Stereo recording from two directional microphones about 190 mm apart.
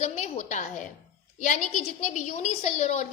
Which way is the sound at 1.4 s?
40° left (ahead or behind).